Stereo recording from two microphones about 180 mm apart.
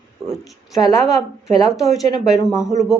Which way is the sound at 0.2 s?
5° right (ahead or behind).